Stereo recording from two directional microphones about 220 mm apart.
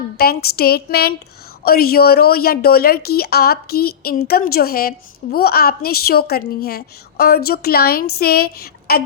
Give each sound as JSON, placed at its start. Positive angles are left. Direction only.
{"t": 0.2, "sound": "a woman's voice", "side_deg": 45}